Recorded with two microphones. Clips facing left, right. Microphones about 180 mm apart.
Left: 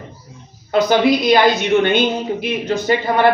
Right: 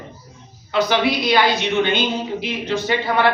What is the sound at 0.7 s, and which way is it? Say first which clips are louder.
A woman's voice: left 5 dB; 45° left (ahead or behind).